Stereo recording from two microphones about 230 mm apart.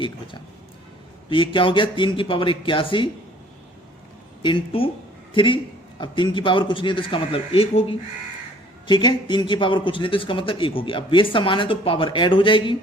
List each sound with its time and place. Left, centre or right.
1.3 s speech: left
4.4 s a man's voice: left